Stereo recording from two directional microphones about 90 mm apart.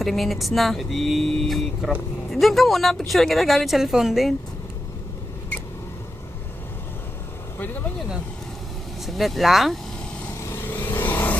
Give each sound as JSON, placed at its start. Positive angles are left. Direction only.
{"t": 0.0, "sound": "speech", "side_deg": 0}
{"t": 9.0, "sound": "speech", "side_deg": 0}
{"t": 10.5, "sound": "vehicle", "side_deg": 25}